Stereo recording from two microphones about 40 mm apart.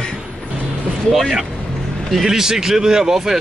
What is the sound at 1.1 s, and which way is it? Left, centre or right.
Speech, centre.